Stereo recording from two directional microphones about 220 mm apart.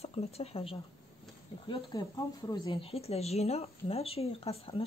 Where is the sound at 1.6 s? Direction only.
20° left (ahead or behind).